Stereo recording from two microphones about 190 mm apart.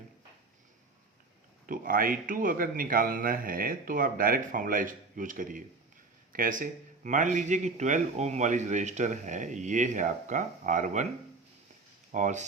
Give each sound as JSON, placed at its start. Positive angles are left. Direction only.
{"t": 1.6, "sound": "speech", "side_deg": -45}
{"t": 12.1, "sound": "speech", "side_deg": -40}